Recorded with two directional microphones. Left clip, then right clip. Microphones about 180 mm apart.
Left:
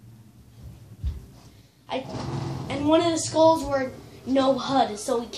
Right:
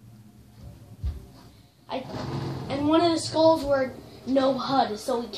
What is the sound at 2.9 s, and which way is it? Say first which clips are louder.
Speech: left 1 dB; 25° left (ahead or behind).